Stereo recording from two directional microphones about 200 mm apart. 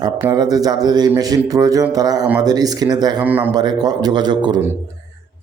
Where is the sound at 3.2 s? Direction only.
10° right (ahead or behind).